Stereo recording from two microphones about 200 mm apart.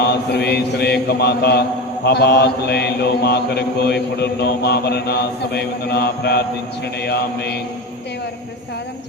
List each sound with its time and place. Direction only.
0.0 s mantra: 55° left (ahead or behind)